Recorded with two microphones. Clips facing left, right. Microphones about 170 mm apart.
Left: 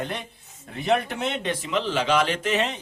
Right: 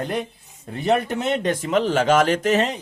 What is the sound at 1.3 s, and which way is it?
A man's voice, 45° right (ahead or behind).